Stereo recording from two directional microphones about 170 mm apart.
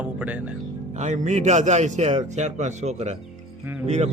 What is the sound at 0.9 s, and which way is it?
A man's voice, 45° right (ahead or behind).